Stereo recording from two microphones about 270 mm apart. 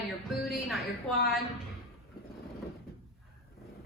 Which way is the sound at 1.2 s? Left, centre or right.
Left.